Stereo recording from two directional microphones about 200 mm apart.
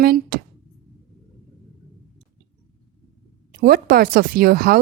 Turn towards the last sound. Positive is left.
turn(degrees=-45)  # may be behind; listen again after turning